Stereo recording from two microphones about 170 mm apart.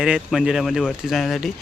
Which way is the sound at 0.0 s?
Centre (ahead or behind).